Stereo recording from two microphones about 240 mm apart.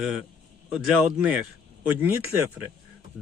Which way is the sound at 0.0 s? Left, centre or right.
Centre.